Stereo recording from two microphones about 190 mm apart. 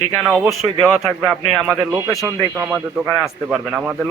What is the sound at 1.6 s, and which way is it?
A man's voice, 15° right (ahead or behind).